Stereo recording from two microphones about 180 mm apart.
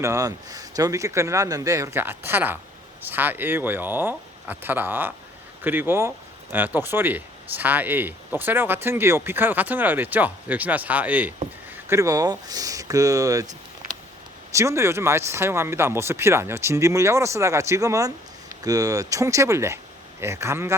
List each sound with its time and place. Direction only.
0.0 s speech: 15° right (ahead or behind)